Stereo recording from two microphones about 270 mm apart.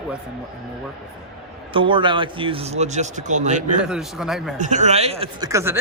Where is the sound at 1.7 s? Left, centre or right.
Centre.